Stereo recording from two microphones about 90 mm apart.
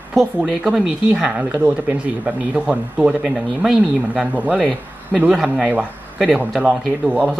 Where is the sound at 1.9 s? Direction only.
15° right (ahead or behind).